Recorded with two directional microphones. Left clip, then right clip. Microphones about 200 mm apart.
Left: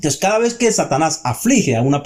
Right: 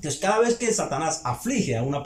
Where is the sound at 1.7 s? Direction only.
45° left (ahead or behind).